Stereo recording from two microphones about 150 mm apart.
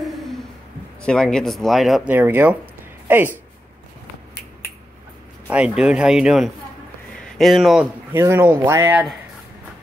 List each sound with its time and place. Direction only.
1.0 s speech: 5° left (ahead or behind)
2.1 s speech: 15° right (ahead or behind)
5.5 s speech: 5° right (ahead or behind)
8.1 s speech: 15° right (ahead or behind)